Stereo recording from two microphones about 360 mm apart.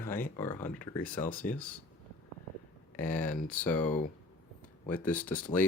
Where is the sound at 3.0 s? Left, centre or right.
Centre.